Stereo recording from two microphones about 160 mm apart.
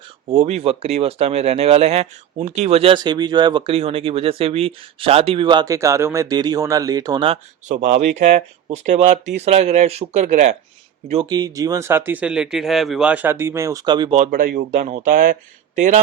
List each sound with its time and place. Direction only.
0.3 s speech: 40° right (ahead or behind)
7.7 s speech: 45° right (ahead or behind)
11.3 s speech: 25° right (ahead or behind)
14.3 s speech: 65° right (ahead or behind); by 16.0 s 50° right (ahead or behind)